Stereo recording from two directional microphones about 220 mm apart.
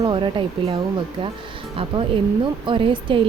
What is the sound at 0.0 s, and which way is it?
Speech, 20° right (ahead or behind).